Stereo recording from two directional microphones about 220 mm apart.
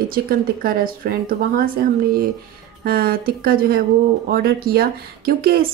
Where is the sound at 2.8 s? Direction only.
45° right (ahead or behind).